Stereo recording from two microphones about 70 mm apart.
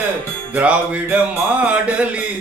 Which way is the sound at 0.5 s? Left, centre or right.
Right.